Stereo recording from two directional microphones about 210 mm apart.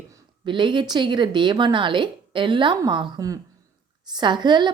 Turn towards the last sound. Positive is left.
turn(degrees=-20)  # may be behind; listen again after turning